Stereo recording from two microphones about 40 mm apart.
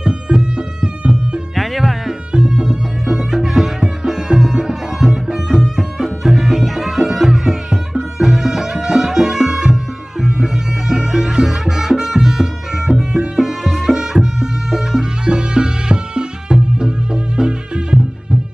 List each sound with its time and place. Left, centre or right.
0.0 s music: centre
1.5 s music: centre
2.3 s music: centre
15.2 s music: centre